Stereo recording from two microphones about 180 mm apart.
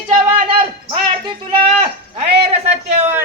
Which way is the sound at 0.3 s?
30° right (ahead or behind).